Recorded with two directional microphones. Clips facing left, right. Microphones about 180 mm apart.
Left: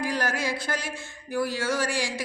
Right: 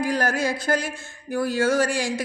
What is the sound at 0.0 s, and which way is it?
A woman's voice, 45° right (ahead or behind).